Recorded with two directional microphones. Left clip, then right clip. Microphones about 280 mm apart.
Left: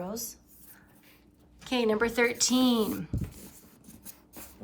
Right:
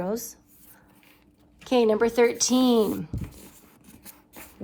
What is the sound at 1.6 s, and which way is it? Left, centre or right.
Speech, centre.